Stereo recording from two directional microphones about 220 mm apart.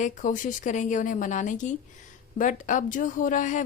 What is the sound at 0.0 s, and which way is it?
A woman's voice, 35° left (ahead or behind).